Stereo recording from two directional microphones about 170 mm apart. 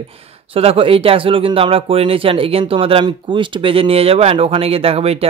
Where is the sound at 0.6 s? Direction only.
35° right (ahead or behind).